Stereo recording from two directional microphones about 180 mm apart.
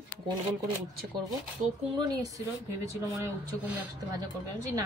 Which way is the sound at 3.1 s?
10° right (ahead or behind).